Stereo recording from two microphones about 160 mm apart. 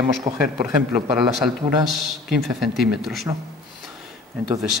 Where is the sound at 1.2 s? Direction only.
Centre (ahead or behind).